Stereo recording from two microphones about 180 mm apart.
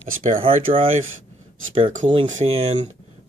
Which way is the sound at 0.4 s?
30° right (ahead or behind).